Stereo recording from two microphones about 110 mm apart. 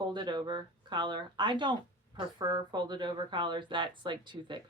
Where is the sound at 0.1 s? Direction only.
40° right (ahead or behind).